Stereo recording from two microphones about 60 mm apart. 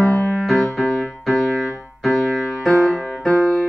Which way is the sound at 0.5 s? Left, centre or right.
Centre.